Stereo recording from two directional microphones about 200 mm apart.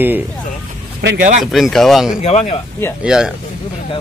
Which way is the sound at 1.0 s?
55° right (ahead or behind).